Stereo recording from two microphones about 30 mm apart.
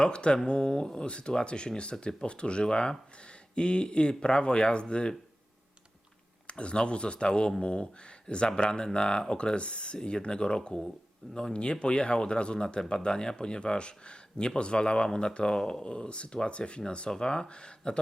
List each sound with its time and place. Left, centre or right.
0.0 s speech: left
3.2 s a sound: left
4.2 s speech: left
6.5 s speech: left